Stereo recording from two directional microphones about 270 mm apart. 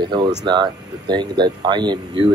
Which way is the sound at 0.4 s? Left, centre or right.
Centre.